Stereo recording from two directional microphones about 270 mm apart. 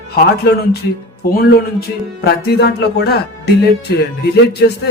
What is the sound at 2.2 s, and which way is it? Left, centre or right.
Speech, left.